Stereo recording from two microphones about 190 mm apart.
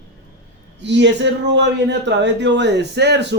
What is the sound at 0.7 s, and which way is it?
A man's voice, 65° right (ahead or behind).